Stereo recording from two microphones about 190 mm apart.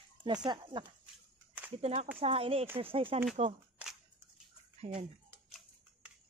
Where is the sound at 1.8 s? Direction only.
35° right (ahead or behind).